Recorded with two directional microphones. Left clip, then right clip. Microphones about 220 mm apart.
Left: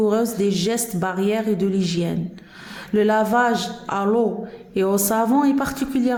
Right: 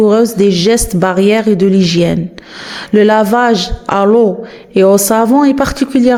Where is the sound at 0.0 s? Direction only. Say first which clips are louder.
Right 11 dB; 30° right (ahead or behind).